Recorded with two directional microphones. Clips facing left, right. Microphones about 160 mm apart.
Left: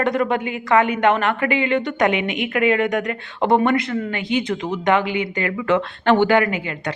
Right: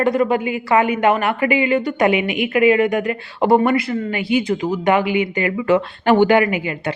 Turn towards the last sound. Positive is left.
turn(degrees=-10)  # may be behind; listen again after turning